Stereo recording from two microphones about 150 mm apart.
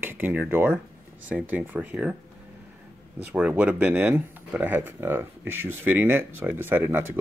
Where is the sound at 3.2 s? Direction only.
10° right (ahead or behind).